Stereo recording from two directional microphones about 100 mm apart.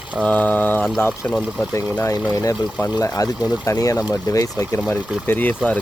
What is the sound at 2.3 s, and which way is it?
Speech, 30° left (ahead or behind).